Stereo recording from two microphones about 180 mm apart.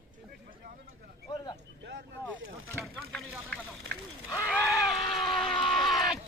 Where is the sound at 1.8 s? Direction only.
75° right (ahead or behind).